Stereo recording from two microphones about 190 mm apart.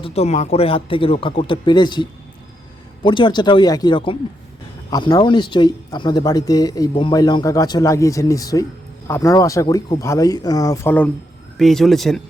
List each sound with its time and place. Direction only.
0.0 s speech: 35° left (ahead or behind); by 12.2 s centre (ahead or behind)